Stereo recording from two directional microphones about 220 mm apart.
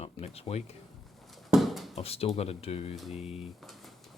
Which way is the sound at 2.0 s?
25° left (ahead or behind).